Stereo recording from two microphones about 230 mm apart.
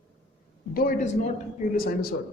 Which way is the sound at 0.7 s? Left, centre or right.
Left.